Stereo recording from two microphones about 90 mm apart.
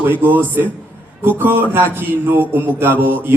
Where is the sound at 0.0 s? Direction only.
20° right (ahead or behind).